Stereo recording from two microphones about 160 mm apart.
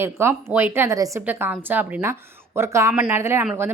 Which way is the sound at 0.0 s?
15° right (ahead or behind).